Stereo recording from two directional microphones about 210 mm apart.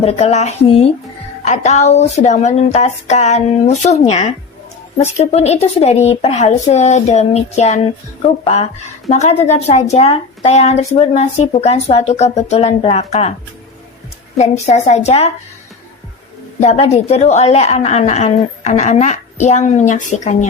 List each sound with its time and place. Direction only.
0.0 s a woman's voice: 30° left (ahead or behind)
14.3 s a woman's voice: 30° left (ahead or behind)
16.6 s a woman's voice: 30° left (ahead or behind)